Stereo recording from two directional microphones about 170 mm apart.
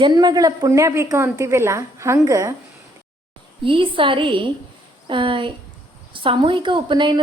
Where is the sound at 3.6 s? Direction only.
30° right (ahead or behind).